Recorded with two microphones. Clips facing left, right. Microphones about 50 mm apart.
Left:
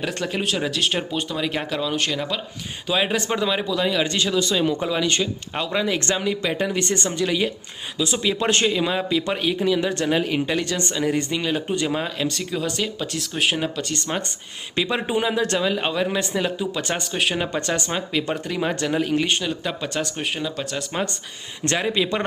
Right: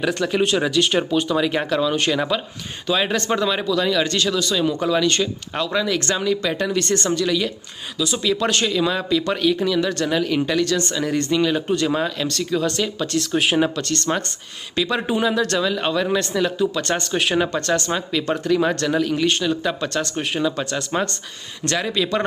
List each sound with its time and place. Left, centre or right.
0.0 s speech: centre
2.8 s speech: centre; by 6.1 s left
6.5 s speech: centre
6.7 s speech: left
7.9 s speech: left
8.2 s speech: left; by 13.8 s centre
13.8 s speech: centre
17.5 s speech: centre
21.6 s speech: left